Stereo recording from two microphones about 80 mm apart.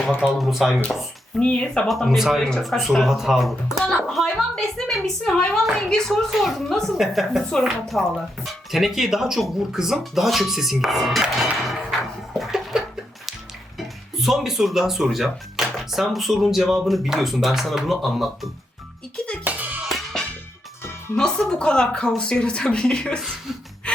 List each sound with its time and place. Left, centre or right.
0.3 s a woman's voice: centre
1.4 s speech: centre
1.9 s a woman's voice: centre
11.6 s a sound: centre
13.7 s speech: centre
19.5 s music: right
21.2 s speech: centre